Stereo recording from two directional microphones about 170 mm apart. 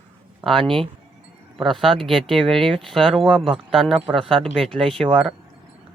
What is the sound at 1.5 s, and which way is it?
Speech, centre (ahead or behind).